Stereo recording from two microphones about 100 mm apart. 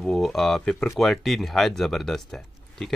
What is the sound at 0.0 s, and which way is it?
Speech, centre (ahead or behind).